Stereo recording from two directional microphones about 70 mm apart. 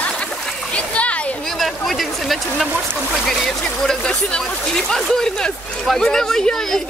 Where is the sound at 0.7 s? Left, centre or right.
Centre.